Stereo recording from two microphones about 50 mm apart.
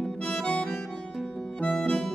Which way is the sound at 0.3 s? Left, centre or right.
Centre.